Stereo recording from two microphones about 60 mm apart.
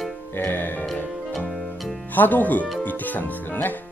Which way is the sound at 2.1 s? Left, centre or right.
Left.